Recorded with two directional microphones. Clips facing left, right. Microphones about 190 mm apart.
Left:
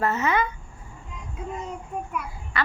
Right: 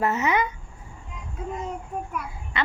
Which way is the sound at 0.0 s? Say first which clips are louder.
Even; 15° right (ahead or behind).